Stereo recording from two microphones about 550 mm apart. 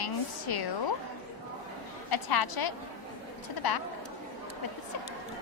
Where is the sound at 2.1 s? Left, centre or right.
Left.